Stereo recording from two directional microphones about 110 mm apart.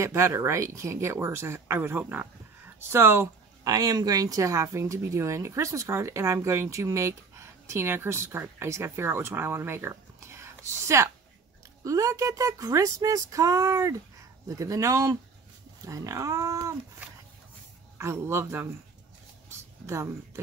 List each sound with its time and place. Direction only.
0.0 s speech: 25° right (ahead or behind)
3.6 s speech: 35° right (ahead or behind)
17.9 s speech: 25° right (ahead or behind)